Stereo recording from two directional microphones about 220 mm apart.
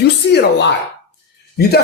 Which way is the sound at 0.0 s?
50° left (ahead or behind).